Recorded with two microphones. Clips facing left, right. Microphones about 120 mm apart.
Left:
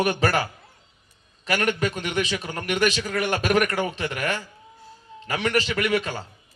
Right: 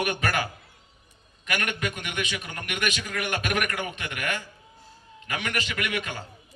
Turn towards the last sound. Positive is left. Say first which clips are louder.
# left 7 dB
turn(degrees=35)  # may be behind; listen again after turning